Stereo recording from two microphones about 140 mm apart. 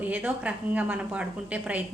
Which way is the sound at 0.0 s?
10° right (ahead or behind).